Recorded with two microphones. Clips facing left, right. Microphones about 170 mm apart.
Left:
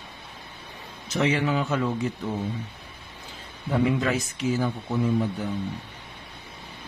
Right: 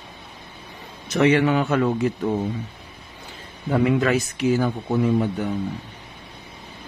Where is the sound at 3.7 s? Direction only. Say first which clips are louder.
Right 4 dB; 70° right (ahead or behind).